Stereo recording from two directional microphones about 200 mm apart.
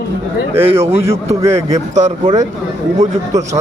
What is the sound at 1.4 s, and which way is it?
Speech, 15° right (ahead or behind).